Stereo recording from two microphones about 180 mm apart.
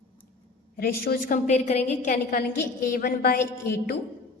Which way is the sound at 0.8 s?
60° left (ahead or behind).